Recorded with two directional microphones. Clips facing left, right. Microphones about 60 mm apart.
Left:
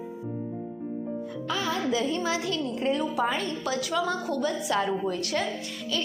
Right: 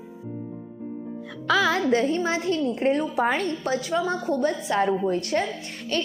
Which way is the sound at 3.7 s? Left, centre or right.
Right.